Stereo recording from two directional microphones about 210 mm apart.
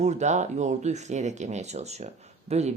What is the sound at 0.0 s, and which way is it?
Speech, 35° right (ahead or behind).